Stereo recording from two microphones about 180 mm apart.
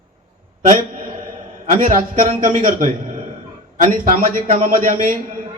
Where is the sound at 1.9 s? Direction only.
50° right (ahead or behind).